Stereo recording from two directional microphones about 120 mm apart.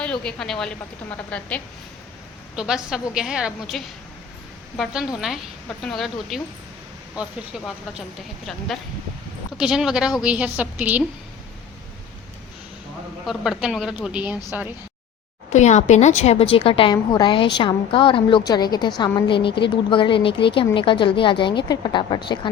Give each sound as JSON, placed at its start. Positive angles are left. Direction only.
{"t": 0.0, "sound": "a woman's voice", "side_deg": 10}
{"t": 2.6, "sound": "a woman's voice", "side_deg": -5}
{"t": 13.2, "sound": "a woman's voice", "side_deg": -5}
{"t": 15.5, "sound": "a woman's voice", "side_deg": 75}
{"t": 16.9, "sound": "a woman's voice", "side_deg": 40}